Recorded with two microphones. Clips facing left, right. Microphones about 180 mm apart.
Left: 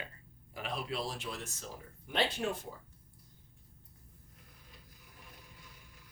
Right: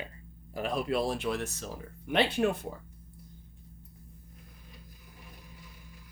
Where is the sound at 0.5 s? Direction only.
45° right (ahead or behind); by 2.6 s 60° right (ahead or behind).